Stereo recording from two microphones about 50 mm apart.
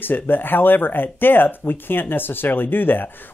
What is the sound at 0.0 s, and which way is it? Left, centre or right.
Speech, left.